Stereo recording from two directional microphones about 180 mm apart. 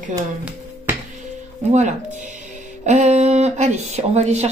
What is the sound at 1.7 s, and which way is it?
Speech, 40° right (ahead or behind).